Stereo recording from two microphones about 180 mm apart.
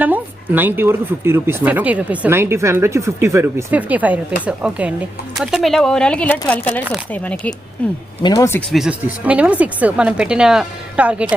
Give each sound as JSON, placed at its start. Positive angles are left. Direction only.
{"t": 0.0, "sound": "a woman's voice", "side_deg": -10}
{"t": 8.2, "sound": "speech", "side_deg": 20}
{"t": 8.7, "sound": "a woman's voice", "side_deg": -5}